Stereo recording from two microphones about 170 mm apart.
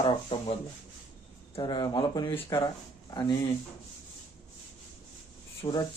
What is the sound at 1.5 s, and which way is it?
Speech, 25° left (ahead or behind).